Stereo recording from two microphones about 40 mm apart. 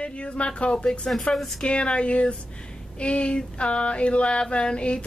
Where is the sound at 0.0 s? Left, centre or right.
Left.